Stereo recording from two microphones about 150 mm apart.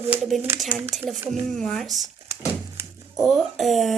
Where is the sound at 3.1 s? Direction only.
Centre (ahead or behind).